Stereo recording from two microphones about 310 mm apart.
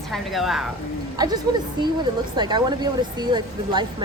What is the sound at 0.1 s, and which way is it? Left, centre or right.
Speech, centre.